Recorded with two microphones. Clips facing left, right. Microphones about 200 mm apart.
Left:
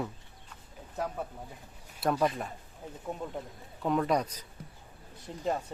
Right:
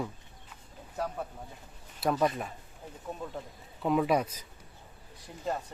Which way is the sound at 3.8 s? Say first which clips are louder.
Right 1 dB; 5° right (ahead or behind).